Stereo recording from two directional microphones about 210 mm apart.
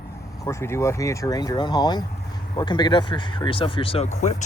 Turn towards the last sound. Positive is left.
turn(degrees=30)  # may be behind; listen again after turning